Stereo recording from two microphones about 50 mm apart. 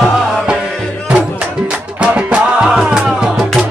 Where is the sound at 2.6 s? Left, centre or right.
Centre.